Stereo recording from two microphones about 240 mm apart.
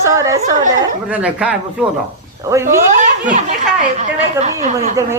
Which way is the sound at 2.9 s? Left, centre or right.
Right.